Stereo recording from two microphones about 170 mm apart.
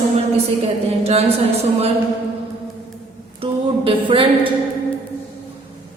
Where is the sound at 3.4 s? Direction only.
30° right (ahead or behind).